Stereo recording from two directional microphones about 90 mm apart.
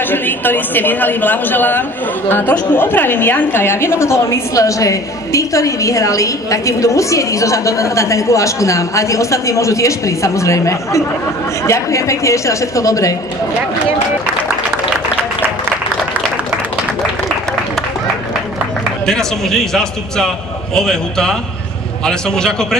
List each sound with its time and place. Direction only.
0.1 s a man's voice: 20° left (ahead or behind); by 13.1 s 40° left (ahead or behind)
19.0 s a man's voice: 5° left (ahead or behind)